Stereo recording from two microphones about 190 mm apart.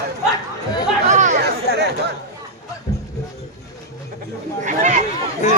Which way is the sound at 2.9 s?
15° left (ahead or behind).